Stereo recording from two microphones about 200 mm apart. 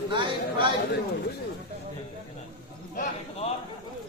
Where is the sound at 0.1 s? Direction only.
25° right (ahead or behind).